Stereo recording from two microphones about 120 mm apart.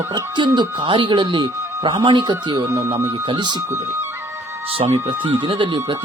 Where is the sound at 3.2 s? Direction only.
40° right (ahead or behind).